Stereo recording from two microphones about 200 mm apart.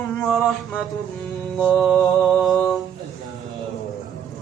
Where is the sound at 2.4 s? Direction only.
Centre (ahead or behind).